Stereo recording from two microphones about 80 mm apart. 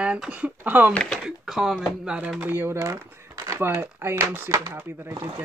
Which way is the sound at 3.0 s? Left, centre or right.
Right.